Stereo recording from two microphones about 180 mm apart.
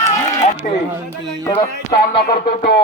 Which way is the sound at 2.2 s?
60° left (ahead or behind).